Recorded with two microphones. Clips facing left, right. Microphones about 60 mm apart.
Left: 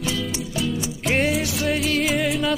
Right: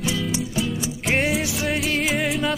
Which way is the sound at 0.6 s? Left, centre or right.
Centre.